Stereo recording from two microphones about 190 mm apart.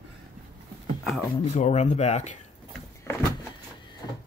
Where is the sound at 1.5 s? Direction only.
35° left (ahead or behind).